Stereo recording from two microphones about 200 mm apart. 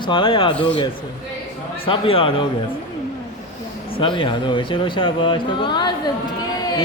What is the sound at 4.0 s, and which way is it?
Speech, 25° left (ahead or behind).